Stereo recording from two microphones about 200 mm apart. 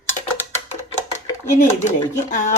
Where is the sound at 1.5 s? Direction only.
35° left (ahead or behind).